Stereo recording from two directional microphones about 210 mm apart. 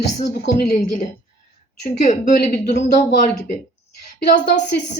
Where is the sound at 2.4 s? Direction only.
45° left (ahead or behind).